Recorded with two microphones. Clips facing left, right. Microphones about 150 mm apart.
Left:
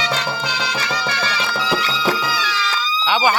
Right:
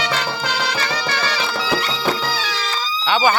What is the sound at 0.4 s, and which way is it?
Music, 55° right (ahead or behind).